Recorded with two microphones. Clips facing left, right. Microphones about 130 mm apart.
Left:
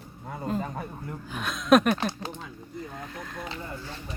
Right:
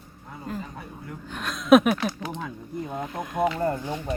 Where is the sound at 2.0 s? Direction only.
30° left (ahead or behind).